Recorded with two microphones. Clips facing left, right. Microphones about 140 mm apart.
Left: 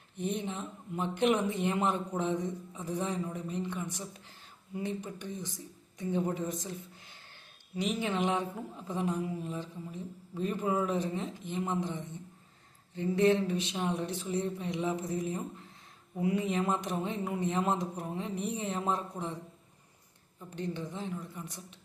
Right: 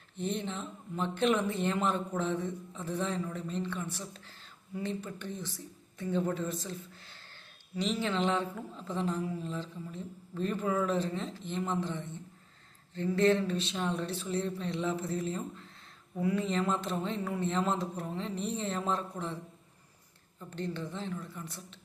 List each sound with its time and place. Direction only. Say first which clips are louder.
0.2 s speech: even; 15° left (ahead or behind)
20.4 s speech: even; 15° left (ahead or behind)